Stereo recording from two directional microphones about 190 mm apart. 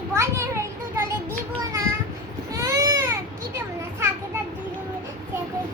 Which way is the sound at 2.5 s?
15° right (ahead or behind).